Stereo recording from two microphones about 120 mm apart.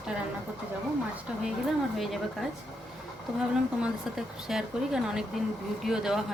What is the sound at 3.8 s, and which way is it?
Speech, 5° right (ahead or behind).